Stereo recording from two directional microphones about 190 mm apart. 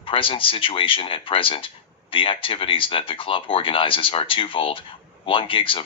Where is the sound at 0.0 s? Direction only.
30° left (ahead or behind).